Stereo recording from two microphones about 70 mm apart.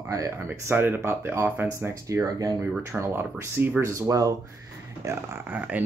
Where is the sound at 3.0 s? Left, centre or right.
Right.